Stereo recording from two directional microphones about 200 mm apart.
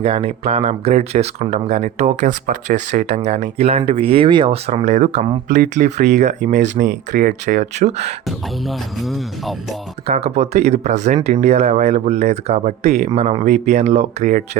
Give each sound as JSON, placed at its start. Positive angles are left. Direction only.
{"t": 0.0, "sound": "speech", "side_deg": -30}
{"t": 8.6, "sound": "speech", "side_deg": 0}
{"t": 10.1, "sound": "speech", "side_deg": -30}